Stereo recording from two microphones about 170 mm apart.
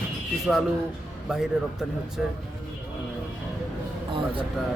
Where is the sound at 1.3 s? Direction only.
5° right (ahead or behind).